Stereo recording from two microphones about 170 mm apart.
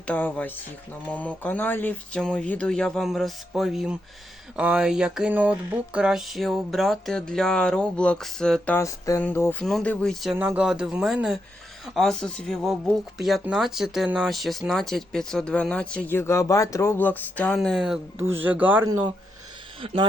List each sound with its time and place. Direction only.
0.1 s speech: 10° left (ahead or behind)
10.3 s speech: 10° right (ahead or behind)
18.2 s speech: 10° right (ahead or behind)
19.8 s speech: 30° right (ahead or behind)